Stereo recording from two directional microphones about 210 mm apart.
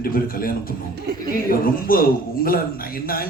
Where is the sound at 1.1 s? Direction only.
50° right (ahead or behind).